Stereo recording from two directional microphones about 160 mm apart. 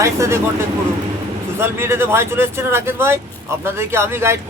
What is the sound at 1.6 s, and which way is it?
Speech, 15° right (ahead or behind).